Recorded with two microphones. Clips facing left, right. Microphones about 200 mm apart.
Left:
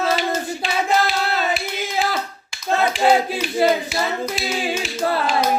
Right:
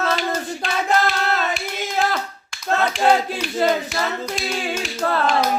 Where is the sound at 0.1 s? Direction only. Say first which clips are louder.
Left 2 dB; 5° left (ahead or behind).